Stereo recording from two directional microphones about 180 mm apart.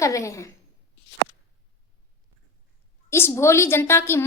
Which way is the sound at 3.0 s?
15° left (ahead or behind).